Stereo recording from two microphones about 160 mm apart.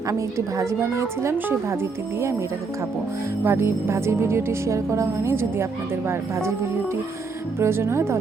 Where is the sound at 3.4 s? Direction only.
15° right (ahead or behind).